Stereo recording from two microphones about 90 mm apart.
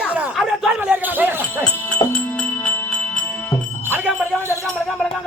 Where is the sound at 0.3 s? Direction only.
5° right (ahead or behind).